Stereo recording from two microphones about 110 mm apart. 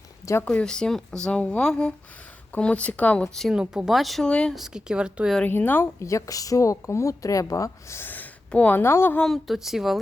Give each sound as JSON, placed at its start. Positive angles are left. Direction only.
{"t": 0.4, "sound": "speech", "side_deg": 5}
{"t": 3.3, "sound": "speech", "side_deg": 0}
{"t": 4.5, "sound": "a woman's voice", "side_deg": -5}
{"t": 5.4, "sound": "speech", "side_deg": 15}
{"t": 9.1, "sound": "speech", "side_deg": 5}